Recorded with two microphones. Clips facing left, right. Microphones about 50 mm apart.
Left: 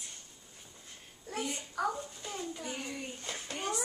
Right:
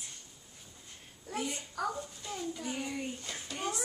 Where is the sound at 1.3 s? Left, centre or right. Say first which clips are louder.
Even; centre.